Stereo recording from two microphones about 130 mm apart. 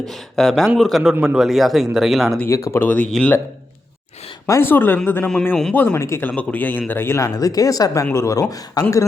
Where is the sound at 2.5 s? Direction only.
25° left (ahead or behind).